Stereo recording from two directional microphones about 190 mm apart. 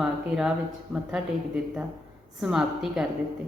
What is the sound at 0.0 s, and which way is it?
Speech, 5° right (ahead or behind).